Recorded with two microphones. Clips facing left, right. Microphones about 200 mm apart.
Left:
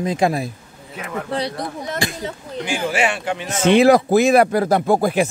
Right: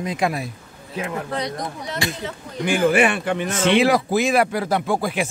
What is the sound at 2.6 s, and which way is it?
Speech, 55° right (ahead or behind).